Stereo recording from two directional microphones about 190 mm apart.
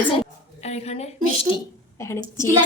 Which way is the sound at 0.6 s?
35° left (ahead or behind).